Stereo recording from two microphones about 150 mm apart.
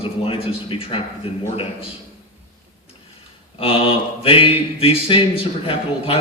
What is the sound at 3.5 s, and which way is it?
Mantra, 40° left (ahead or behind).